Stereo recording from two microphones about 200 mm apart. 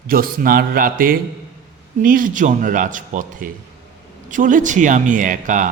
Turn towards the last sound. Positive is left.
turn(degrees=-40)  # may be behind; listen again after turning